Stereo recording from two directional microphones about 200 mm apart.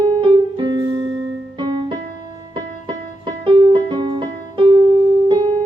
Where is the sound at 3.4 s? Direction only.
25° right (ahead or behind).